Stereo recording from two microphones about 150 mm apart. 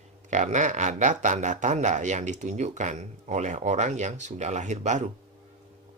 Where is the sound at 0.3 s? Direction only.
55° right (ahead or behind).